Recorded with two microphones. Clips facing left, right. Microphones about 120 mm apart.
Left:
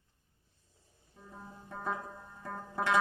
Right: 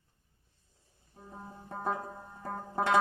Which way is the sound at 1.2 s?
35° right (ahead or behind).